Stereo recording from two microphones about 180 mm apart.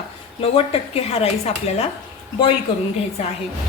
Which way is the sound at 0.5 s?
35° left (ahead or behind).